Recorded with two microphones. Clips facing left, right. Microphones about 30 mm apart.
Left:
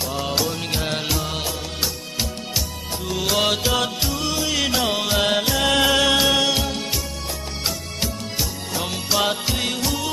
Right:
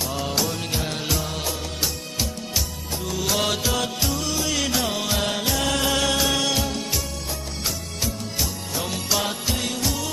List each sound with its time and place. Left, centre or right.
0.2 s music: centre
3.1 s music: left
3.3 s music: centre
4.7 s music: left
5.0 s music: left
8.4 s music: centre
9.2 s music: left